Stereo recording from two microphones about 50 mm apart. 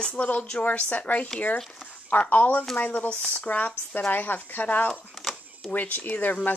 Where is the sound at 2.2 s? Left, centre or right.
Left.